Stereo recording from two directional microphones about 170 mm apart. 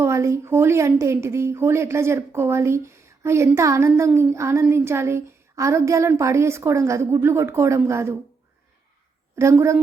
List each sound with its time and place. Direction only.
0.0 s a woman's voice: 15° right (ahead or behind)
9.3 s a woman's voice: 15° right (ahead or behind)